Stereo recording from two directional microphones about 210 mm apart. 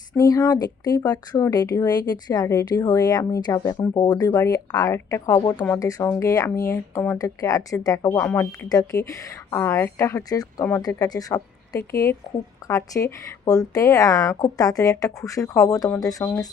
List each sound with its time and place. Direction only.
0.1 s speech: 15° left (ahead or behind)